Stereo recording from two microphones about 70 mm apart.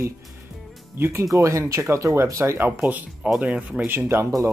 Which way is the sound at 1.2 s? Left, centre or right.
Right.